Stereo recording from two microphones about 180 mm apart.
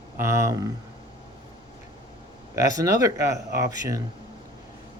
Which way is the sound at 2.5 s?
20° right (ahead or behind).